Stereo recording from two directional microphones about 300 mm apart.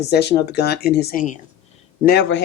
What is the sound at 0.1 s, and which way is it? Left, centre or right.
Speech, left.